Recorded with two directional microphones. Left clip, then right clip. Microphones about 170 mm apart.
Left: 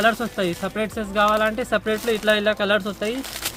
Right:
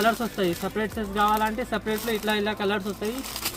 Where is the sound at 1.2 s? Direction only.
50° left (ahead or behind).